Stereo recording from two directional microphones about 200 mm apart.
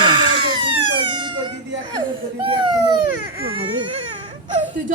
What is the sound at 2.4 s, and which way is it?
Baby cry, 25° right (ahead or behind).